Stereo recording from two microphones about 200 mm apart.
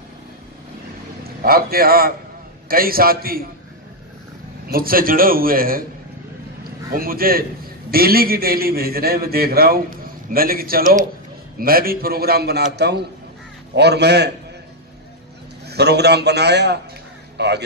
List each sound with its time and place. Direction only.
1.4 s a man's voice: 50° right (ahead or behind)
4.6 s a man's voice: 45° right (ahead or behind)
15.6 s a man's voice: 55° right (ahead or behind)